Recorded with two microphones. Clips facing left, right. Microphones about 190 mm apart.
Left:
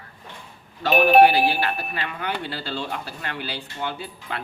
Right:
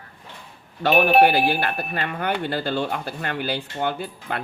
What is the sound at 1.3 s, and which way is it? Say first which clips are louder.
Speech: even; 50° right (ahead or behind).